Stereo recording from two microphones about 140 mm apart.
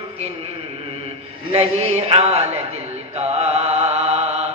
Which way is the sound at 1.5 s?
45° right (ahead or behind).